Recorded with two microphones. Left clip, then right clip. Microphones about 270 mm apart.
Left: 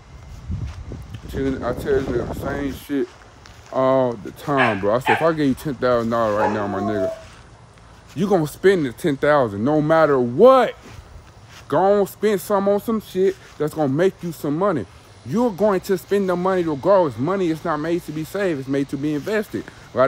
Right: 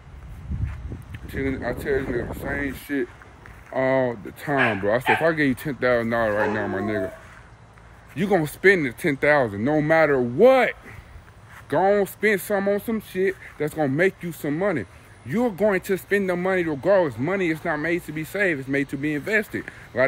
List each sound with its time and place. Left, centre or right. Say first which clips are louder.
1.3 s speech: left 3 dB; centre
8.2 s speech: left 2 dB; centre